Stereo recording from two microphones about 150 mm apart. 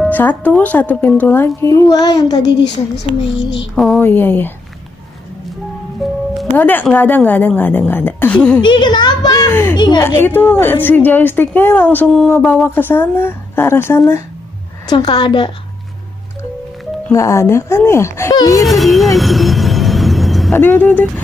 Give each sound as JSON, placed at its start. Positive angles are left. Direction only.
{"t": 0.1, "sound": "a woman's voice", "side_deg": 10}
{"t": 3.7, "sound": "a woman's voice", "side_deg": 5}
{"t": 6.0, "sound": "music", "side_deg": 0}
{"t": 6.5, "sound": "a woman's voice", "side_deg": 10}
{"t": 8.5, "sound": "speech", "side_deg": 30}
{"t": 9.8, "sound": "speech", "side_deg": 30}
{"t": 10.0, "sound": "a woman's voice", "side_deg": 15}
{"t": 12.6, "sound": "a woman's voice", "side_deg": 15}
{"t": 14.9, "sound": "a woman's voice", "side_deg": 30}
{"t": 17.1, "sound": "speech", "side_deg": 20}
{"t": 18.6, "sound": "music", "side_deg": 0}
{"t": 20.5, "sound": "a woman's voice", "side_deg": 15}